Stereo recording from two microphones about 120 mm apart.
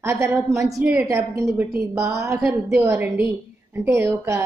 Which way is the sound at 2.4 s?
10° right (ahead or behind).